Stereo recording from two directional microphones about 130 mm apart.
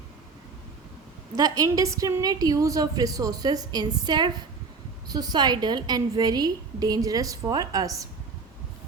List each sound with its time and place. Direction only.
1.4 s a woman's voice: 30° right (ahead or behind)